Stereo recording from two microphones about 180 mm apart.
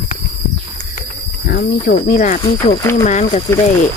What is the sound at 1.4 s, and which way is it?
Speech, 55° left (ahead or behind).